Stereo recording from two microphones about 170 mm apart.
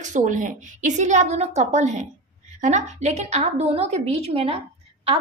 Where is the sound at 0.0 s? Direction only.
45° right (ahead or behind).